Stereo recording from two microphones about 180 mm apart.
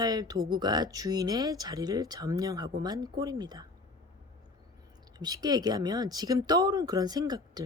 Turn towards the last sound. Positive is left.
turn(degrees=-20)  # may be behind; listen again after turning